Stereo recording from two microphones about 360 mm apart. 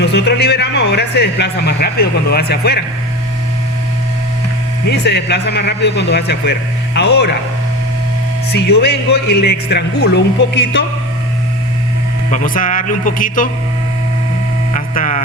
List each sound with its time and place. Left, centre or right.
0.0 s speech: left
4.9 s speech: left
8.5 s speech: left
12.3 s speech: left
14.7 s a sound: left